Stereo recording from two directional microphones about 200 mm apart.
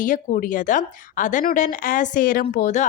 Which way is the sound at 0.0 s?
40° left (ahead or behind).